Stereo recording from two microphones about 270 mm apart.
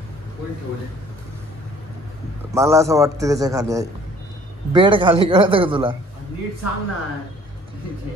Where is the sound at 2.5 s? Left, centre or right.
Centre.